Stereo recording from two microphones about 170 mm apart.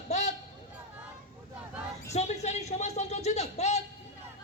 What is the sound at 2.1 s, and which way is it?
A man's voice, 40° left (ahead or behind).